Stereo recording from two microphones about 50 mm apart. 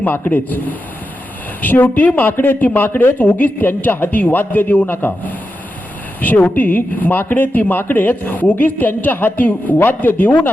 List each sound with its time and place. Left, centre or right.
0.0 s speech: left